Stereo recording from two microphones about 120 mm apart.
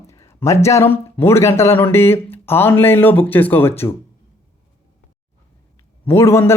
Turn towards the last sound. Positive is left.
turn(degrees=20)  # may be behind; listen again after turning